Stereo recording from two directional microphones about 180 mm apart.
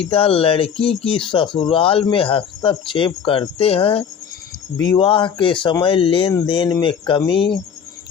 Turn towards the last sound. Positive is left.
turn(degrees=30)  # may be behind; listen again after turning